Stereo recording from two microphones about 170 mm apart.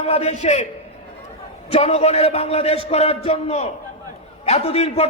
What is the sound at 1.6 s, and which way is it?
A man's voice, 40° left (ahead or behind).